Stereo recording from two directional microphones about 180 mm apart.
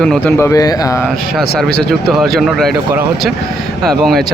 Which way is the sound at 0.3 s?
15° left (ahead or behind).